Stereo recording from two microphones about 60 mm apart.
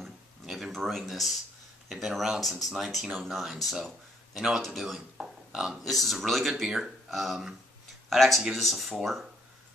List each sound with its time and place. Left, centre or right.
0.0 s a sound: centre
1.9 s speech: centre
5.9 s speech: centre